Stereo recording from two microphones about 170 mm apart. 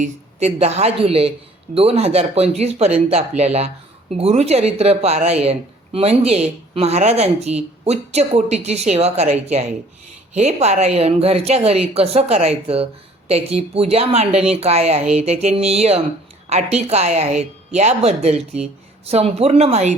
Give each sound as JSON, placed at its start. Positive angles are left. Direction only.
{"t": 0.0, "sound": "a woman's voice", "side_deg": -40}